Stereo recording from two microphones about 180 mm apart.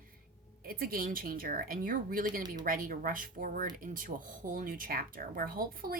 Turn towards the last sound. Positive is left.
turn(degrees=-55)  # may be behind; listen again after turning